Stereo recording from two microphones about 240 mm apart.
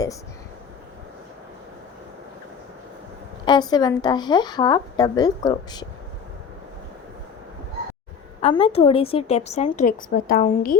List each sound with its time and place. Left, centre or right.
3.4 s a woman's voice: centre
8.4 s a woman's voice: left